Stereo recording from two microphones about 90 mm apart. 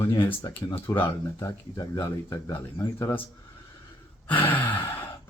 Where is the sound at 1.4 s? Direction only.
40° left (ahead or behind).